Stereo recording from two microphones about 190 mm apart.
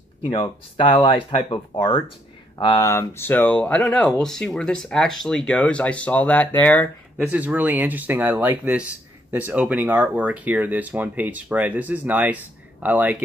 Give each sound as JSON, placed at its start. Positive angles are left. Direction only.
{"t": 0.2, "sound": "speech", "side_deg": 25}
{"t": 7.2, "sound": "speech", "side_deg": -10}